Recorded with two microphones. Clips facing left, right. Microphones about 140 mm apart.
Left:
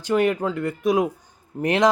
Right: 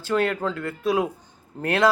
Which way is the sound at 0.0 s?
15° left (ahead or behind).